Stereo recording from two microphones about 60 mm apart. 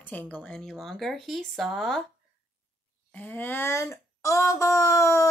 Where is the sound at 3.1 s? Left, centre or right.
Left.